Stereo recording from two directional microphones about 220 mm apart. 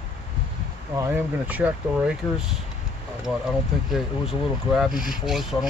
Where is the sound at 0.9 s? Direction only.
10° right (ahead or behind).